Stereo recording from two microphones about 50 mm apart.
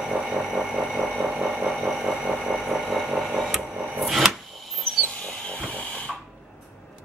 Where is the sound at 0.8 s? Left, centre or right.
Centre.